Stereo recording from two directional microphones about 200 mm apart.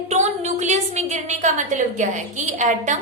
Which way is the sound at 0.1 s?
35° right (ahead or behind).